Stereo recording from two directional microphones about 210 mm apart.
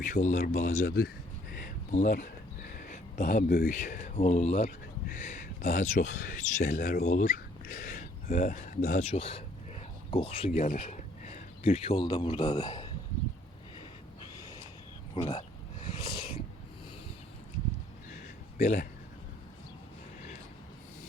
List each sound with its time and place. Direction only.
0.0 s speech: 35° left (ahead or behind)
1.5 s a sound: 40° left (ahead or behind)
2.7 s speech: 40° left (ahead or behind); by 12.9 s 25° left (ahead or behind)
15.1 s speech: 25° left (ahead or behind)
16.0 s a sound: 25° left (ahead or behind)
18.5 s speech: 35° left (ahead or behind)